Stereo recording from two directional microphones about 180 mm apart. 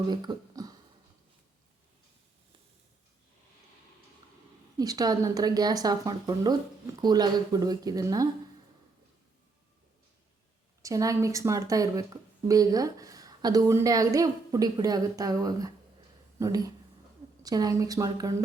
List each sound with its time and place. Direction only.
0.1 s speech: 25° right (ahead or behind)
4.8 s a woman's voice: 20° right (ahead or behind)
10.8 s a woman's voice: 20° right (ahead or behind)